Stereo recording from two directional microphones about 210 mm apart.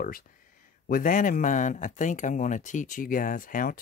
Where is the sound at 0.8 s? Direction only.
40° left (ahead or behind).